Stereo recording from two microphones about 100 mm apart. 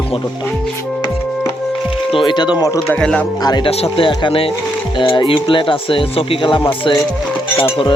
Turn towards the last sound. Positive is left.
turn(degrees=55)  # may be behind; listen again after turning